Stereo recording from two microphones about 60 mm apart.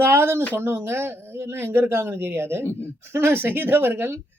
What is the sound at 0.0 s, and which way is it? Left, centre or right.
Speech, right.